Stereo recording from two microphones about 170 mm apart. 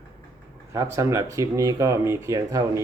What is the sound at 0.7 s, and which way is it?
Speech, 15° right (ahead or behind).